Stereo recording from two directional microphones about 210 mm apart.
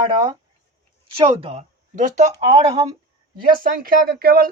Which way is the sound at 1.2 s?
25° right (ahead or behind).